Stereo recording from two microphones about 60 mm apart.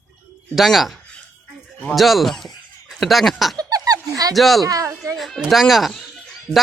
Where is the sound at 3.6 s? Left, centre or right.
Right.